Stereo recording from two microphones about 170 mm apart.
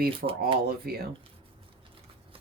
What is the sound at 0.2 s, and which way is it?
Speech, 60° right (ahead or behind).